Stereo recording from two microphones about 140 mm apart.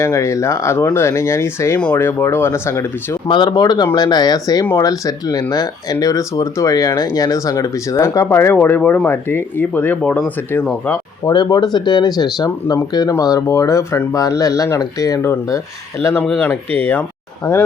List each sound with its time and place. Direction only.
0.0 s speech: 20° left (ahead or behind)
3.2 s speech: 35° left (ahead or behind); by 10.9 s 10° left (ahead or behind)
11.3 s speech: 30° left (ahead or behind)
16.2 s speech: 5° left (ahead or behind)